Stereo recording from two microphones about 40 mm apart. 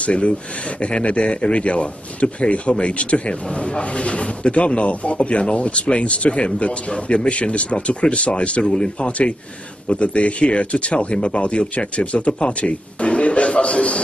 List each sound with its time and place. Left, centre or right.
0.0 s speech: left
9.8 s speech: left